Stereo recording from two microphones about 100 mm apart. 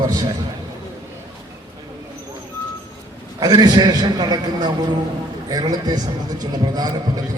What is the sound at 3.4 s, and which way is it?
A man's voice, 40° right (ahead or behind).